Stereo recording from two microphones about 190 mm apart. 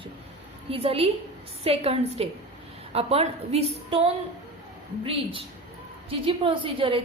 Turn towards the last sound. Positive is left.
turn(degrees=-30)  # may be behind; listen again after turning